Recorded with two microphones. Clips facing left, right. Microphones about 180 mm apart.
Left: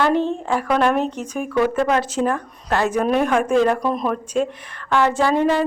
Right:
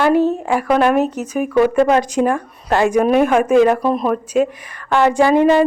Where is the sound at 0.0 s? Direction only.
10° right (ahead or behind).